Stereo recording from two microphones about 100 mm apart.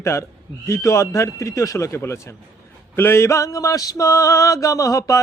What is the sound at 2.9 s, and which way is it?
Mantra, 25° left (ahead or behind).